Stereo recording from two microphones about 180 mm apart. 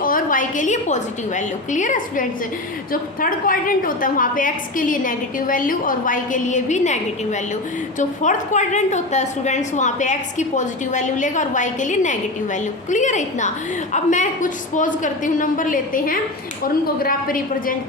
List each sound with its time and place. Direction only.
0.0 s a woman's voice: 50° left (ahead or behind)